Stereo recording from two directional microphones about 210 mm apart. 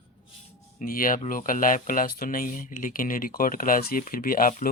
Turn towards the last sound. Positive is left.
turn(degrees=45)  # may be behind; listen again after turning